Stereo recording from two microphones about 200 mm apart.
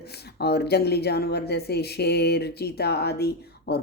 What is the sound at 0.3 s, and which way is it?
Speech, 55° left (ahead or behind).